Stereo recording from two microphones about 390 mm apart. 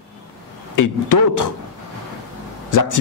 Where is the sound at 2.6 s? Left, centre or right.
Left.